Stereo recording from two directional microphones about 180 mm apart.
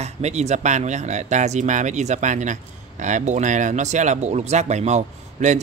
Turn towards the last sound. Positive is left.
turn(degrees=-40)  # may be behind; listen again after turning